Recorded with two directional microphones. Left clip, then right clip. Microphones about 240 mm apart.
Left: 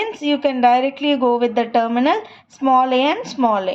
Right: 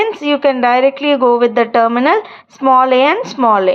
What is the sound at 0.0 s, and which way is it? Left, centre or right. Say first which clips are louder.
A woman's voice: right 6 dB; centre.